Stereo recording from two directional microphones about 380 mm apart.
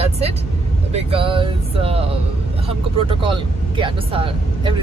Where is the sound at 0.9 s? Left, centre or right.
Centre.